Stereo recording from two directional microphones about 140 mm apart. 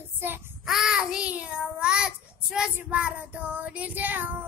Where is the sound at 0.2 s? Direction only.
15° right (ahead or behind).